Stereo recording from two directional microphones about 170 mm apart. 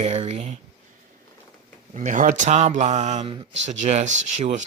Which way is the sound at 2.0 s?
50° right (ahead or behind).